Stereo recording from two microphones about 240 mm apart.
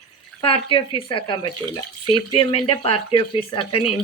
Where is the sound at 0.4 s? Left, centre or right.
Left.